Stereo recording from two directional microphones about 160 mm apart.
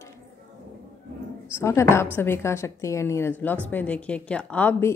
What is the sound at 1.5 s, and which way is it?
A woman's voice, 15° left (ahead or behind).